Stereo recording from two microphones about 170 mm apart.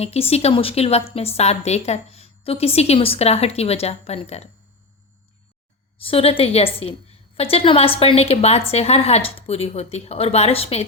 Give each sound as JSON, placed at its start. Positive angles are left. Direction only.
{"t": 0.0, "sound": "a woman's voice", "side_deg": 35}
{"t": 6.0, "sound": "a woman's voice", "side_deg": 35}